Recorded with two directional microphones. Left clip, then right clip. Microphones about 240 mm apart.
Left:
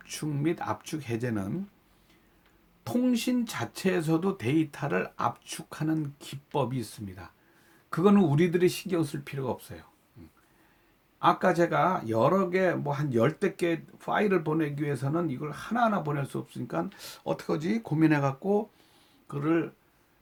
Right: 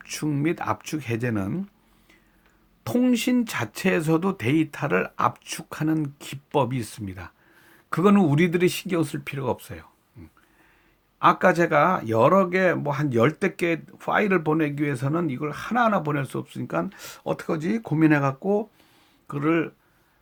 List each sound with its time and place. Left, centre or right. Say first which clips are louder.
0.0 s speech: right 5 dB; right
2.8 s speech: right 5 dB; right
11.2 s speech: right 5 dB; right